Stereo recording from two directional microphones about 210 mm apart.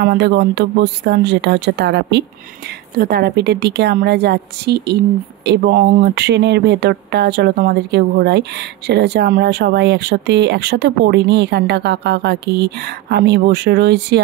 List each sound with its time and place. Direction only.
0.0 s speech: 50° right (ahead or behind)